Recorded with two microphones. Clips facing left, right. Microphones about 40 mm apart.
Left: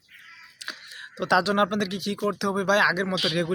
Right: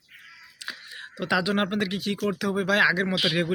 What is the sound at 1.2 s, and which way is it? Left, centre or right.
Speech, centre.